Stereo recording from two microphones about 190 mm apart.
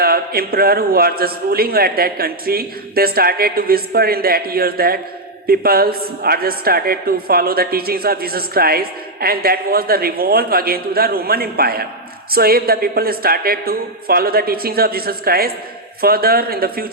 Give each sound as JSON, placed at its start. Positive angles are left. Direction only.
{"t": 0.0, "sound": "a woman's voice", "side_deg": -55}